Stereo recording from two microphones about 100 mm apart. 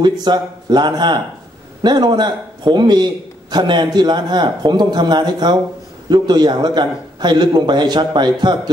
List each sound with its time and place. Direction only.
0.0 s a man's voice: 45° right (ahead or behind)